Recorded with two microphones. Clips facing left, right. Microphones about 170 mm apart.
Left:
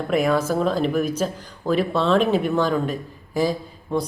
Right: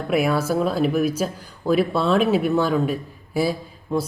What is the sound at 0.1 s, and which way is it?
A woman's voice, 10° right (ahead or behind).